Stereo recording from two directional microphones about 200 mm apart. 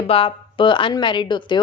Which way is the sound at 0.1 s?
25° left (ahead or behind).